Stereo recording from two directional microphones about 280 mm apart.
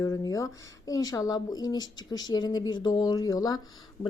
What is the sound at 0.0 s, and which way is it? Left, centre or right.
A woman's voice, centre.